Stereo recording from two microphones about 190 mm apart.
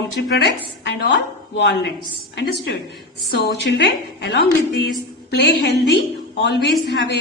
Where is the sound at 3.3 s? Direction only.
60° left (ahead or behind).